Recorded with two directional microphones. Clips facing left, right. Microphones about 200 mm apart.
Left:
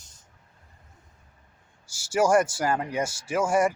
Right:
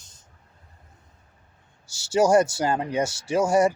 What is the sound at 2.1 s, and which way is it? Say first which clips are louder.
Speech: right 3 dB; 20° right (ahead or behind).